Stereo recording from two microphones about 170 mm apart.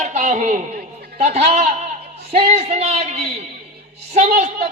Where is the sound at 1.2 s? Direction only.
40° right (ahead or behind).